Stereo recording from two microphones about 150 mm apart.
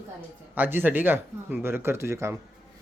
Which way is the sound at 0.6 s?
15° right (ahead or behind).